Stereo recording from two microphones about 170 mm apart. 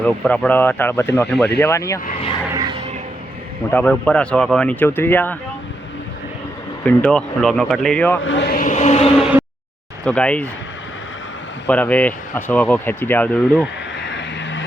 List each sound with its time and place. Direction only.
0.0 s speech: 5° left (ahead or behind)
1.3 s speech: 75° left (ahead or behind)
1.6 s speech: 15° left (ahead or behind)
2.5 s music: 25° right (ahead or behind)
3.7 s speech: 10° left (ahead or behind)
6.8 s speech: 5° left (ahead or behind)
8.2 s chant: 90° left
8.5 s chant: 45° left (ahead or behind)
10.1 s speech: 10° left (ahead or behind)
11.6 s speech: 10° left (ahead or behind)
14.0 s vehicle: 90° left